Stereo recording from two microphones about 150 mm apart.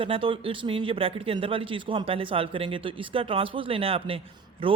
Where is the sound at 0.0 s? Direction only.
35° right (ahead or behind).